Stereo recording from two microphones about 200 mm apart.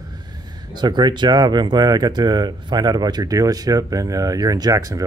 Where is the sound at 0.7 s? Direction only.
20° right (ahead or behind).